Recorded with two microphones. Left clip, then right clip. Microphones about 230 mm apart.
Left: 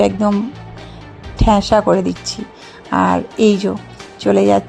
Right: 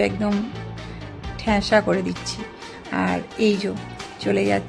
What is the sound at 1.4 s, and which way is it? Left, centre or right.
Speech, centre.